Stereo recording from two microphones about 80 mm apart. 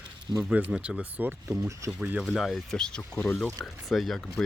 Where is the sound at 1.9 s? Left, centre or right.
Centre.